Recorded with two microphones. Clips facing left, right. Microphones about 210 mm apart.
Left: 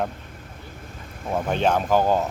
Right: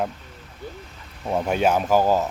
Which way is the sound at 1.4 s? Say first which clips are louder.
Right 1 dB; 10° right (ahead or behind).